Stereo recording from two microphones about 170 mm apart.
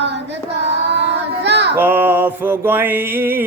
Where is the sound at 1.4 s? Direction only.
80° right.